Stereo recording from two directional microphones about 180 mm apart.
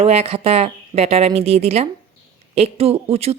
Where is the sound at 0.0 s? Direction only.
35° right (ahead or behind).